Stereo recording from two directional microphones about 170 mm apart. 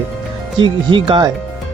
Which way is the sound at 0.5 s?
30° right (ahead or behind).